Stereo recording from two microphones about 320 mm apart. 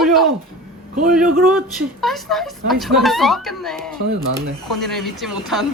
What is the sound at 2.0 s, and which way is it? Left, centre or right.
Speech, centre.